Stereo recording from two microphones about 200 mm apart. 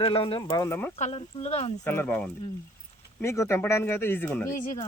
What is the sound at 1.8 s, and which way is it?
Speech, 10° left (ahead or behind).